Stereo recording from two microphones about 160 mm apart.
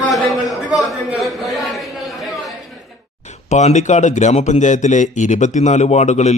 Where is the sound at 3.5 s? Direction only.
45° left (ahead or behind).